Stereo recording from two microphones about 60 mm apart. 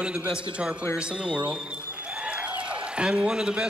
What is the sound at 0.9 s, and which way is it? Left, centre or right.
Speech, centre.